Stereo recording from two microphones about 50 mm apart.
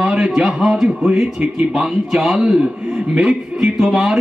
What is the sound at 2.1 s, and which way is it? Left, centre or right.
A man's voice, centre.